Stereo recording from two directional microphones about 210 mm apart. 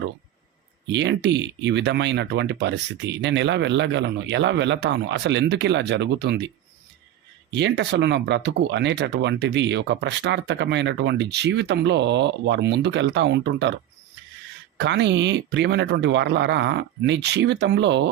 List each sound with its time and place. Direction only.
0.9 s speech: 55° right (ahead or behind)
7.5 s speech: 55° right (ahead or behind)
14.8 s speech: 55° right (ahead or behind)